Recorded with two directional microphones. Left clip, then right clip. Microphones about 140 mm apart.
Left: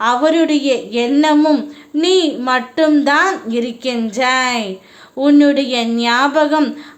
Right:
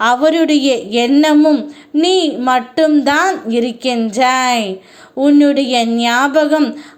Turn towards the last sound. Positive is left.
turn(degrees=-20)  # may be behind; listen again after turning